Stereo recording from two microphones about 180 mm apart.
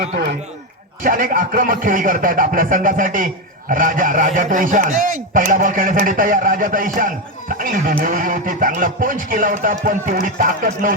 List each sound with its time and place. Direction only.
1.0 s a man's voice: 50° right (ahead or behind)